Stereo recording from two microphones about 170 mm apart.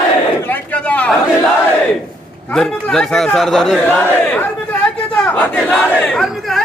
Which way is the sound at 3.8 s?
10° left (ahead or behind).